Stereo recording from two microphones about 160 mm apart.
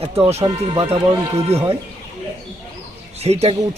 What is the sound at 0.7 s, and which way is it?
Speech, 30° right (ahead or behind).